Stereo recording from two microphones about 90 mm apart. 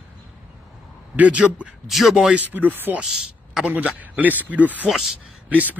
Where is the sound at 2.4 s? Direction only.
20° right (ahead or behind).